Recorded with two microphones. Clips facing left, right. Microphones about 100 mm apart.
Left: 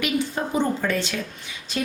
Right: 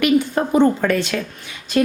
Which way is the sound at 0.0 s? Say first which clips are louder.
Right 8 dB; 55° right (ahead or behind).